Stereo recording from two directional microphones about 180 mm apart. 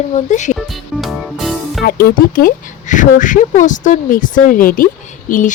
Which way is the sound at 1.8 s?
55° left (ahead or behind).